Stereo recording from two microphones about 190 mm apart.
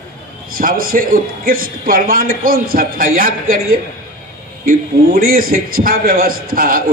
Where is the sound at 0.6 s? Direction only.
50° right (ahead or behind).